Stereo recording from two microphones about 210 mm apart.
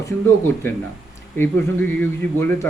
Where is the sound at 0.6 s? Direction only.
10° left (ahead or behind).